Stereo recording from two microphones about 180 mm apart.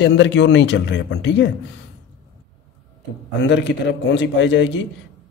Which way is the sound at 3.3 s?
85° left.